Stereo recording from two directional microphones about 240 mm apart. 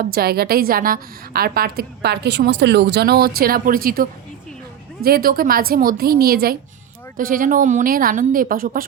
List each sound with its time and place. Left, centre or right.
0.0 s a woman's voice: right